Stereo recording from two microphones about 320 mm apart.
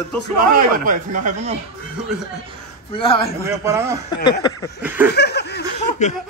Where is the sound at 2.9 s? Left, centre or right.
Centre.